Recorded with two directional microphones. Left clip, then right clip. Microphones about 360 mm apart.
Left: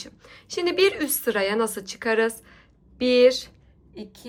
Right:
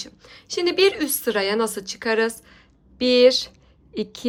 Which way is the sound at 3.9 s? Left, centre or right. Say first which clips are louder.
Right 12 dB; centre.